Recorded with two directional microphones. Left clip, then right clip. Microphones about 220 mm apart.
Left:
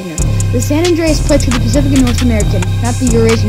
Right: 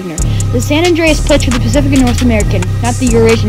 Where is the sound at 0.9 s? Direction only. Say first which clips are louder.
Right 2 dB; 30° right (ahead or behind).